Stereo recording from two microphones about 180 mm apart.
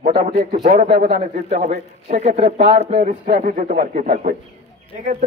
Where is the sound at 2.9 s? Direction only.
35° right (ahead or behind).